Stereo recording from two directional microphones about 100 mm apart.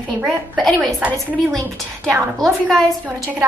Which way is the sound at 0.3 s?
Centre (ahead or behind).